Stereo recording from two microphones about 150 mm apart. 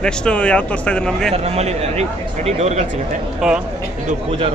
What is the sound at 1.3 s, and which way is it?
A man's voice, 45° right (ahead or behind).